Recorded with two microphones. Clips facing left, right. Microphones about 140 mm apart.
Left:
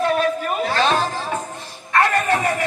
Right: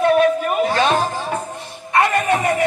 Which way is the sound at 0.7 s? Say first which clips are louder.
Left 1 dB; 15° right (ahead or behind).